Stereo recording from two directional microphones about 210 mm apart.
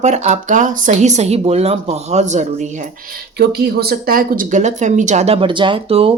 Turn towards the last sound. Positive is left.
turn(degrees=-25)  # may be behind; listen again after turning